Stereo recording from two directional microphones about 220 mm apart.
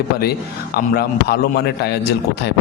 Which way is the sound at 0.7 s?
45° left (ahead or behind).